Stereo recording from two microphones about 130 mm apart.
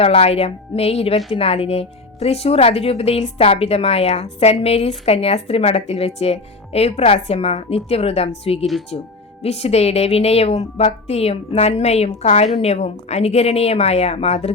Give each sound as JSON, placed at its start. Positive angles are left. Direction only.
{"t": 0.0, "sound": "speech", "side_deg": 50}